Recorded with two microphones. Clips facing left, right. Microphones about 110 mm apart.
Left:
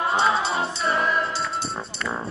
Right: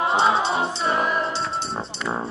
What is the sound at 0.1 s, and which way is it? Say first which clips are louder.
Music: right 1 dB; 20° right (ahead or behind).